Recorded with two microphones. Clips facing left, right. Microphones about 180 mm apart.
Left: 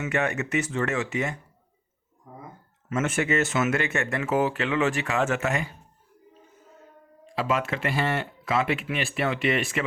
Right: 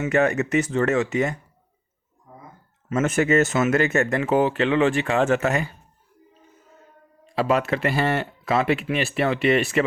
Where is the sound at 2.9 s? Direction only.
40° right (ahead or behind).